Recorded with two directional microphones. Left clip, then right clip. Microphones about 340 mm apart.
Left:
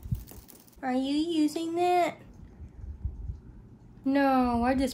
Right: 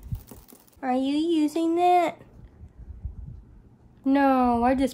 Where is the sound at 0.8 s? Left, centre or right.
Right.